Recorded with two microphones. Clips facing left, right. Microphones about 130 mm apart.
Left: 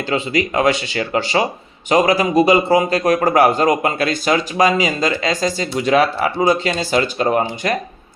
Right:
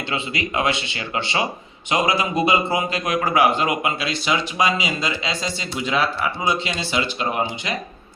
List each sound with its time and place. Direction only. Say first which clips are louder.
0.1 s a man's voice: left 7 dB; 40° left (ahead or behind)